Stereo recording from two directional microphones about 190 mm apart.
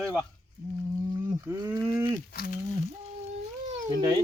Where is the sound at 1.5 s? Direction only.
15° right (ahead or behind).